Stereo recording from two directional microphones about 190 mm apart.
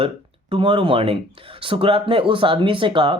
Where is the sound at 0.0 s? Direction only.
30° right (ahead or behind).